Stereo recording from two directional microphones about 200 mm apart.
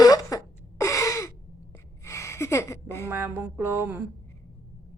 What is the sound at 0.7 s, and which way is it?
Gasp, 15° left (ahead or behind).